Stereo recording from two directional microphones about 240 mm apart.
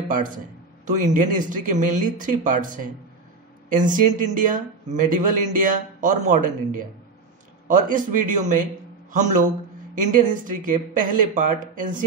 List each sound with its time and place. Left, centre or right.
0.8 s speech: right
7.6 s speech: right